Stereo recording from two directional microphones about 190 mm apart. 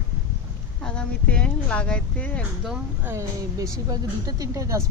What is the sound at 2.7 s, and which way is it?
Speech, 10° right (ahead or behind).